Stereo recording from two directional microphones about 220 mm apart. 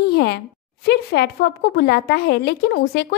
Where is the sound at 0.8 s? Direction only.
50° left (ahead or behind).